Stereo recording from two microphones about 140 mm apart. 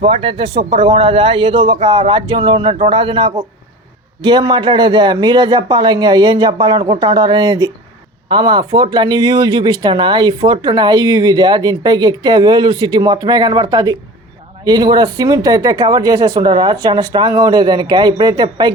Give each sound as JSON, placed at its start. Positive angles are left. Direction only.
{"t": 0.0, "sound": "speech", "side_deg": -40}